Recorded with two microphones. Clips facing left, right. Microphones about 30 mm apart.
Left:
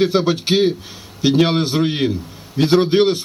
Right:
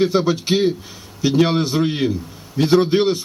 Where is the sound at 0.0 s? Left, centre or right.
Left.